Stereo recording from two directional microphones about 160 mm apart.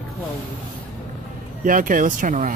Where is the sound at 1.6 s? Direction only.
60° right (ahead or behind).